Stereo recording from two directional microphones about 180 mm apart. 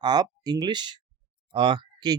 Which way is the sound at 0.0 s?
25° right (ahead or behind).